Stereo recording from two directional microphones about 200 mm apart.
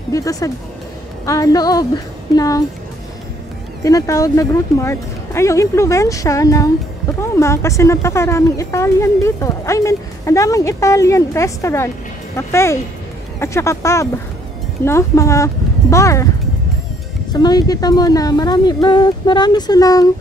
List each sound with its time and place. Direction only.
0.1 s speech: 15° left (ahead or behind)
3.8 s a child's voice: 15° left (ahead or behind)
17.3 s a woman's voice: 20° left (ahead or behind)